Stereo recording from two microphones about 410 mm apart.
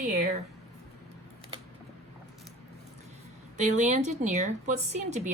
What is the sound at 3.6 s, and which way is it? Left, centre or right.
A woman's voice, centre.